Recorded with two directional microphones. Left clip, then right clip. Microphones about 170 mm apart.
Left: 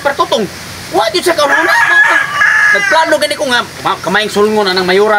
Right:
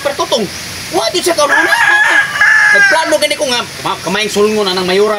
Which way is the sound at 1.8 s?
70° left (ahead or behind).